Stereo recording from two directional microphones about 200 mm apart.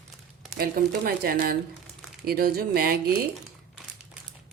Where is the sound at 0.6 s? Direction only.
50° right (ahead or behind).